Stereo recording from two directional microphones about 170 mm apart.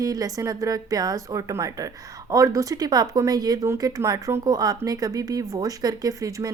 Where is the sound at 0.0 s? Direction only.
20° right (ahead or behind).